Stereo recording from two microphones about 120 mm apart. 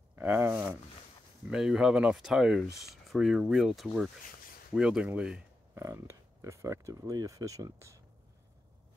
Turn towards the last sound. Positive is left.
turn(degrees=-25)  # may be behind; listen again after turning